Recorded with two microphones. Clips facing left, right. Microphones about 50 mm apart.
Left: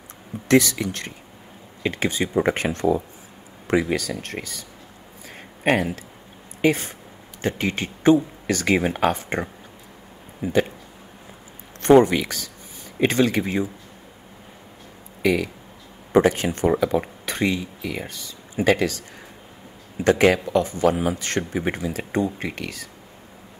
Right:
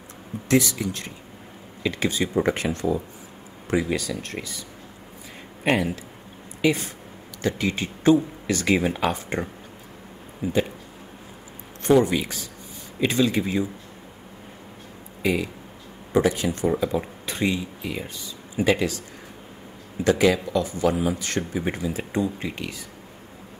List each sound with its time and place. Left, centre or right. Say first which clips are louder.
0.5 s a man's voice: left 3 dB; left
1.8 s a man's voice: left 1 dB; left
11.9 s speech: left 4 dB; left
12.2 s a man's voice: left 2 dB; left
15.2 s speech: left 3 dB; left
16.1 s a man's voice: left 3 dB; left